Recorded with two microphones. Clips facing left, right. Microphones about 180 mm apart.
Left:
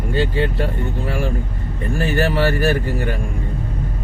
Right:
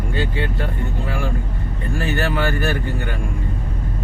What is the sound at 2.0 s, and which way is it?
Speech, 35° left (ahead or behind).